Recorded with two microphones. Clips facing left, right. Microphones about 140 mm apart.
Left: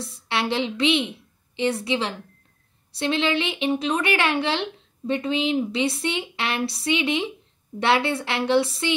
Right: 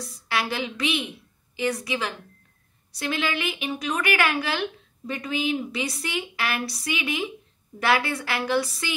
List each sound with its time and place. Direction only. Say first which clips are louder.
0.0 s a woman's voice: left 2 dB; 25° left (ahead or behind)